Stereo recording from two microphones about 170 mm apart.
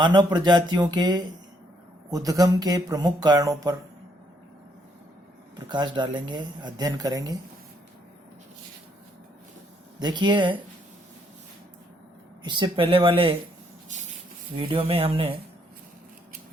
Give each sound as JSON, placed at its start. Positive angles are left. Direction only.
{"t": 0.0, "sound": "speech", "side_deg": -25}
{"t": 5.5, "sound": "speech", "side_deg": -25}
{"t": 10.0, "sound": "speech", "side_deg": -25}
{"t": 12.4, "sound": "speech", "side_deg": -25}
{"t": 14.5, "sound": "speech", "side_deg": -35}